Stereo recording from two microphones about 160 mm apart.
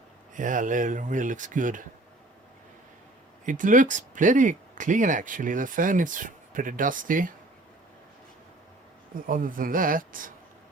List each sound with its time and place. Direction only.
0.3 s speech: 55° right (ahead or behind)
3.4 s speech: 55° right (ahead or behind)
9.1 s speech: 60° right (ahead or behind)